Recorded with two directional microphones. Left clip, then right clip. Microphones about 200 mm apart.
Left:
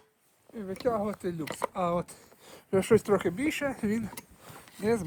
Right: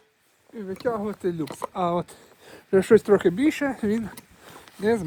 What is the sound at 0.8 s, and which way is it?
Speech, 55° right (ahead or behind).